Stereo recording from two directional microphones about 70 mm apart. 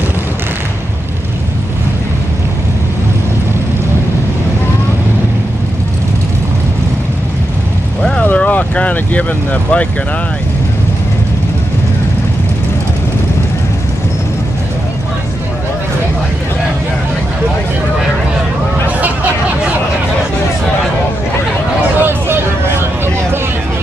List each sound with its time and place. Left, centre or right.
8.2 s vehicle: left
18.9 s a sound: right
22.0 s vehicle: right